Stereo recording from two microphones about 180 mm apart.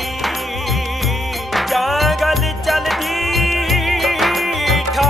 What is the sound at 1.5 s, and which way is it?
Music, centre (ahead or behind).